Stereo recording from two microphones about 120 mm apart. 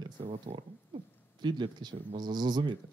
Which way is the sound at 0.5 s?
50° right (ahead or behind).